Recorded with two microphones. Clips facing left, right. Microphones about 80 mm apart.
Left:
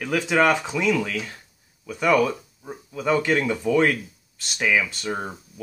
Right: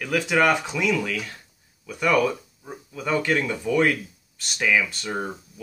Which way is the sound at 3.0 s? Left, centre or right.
Centre.